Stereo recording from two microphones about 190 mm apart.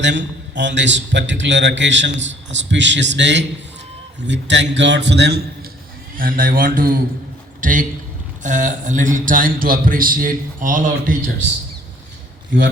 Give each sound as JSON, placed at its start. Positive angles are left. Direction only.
{"t": 0.0, "sound": "a man's voice", "side_deg": -65}
{"t": 6.1, "sound": "a man's voice", "side_deg": -50}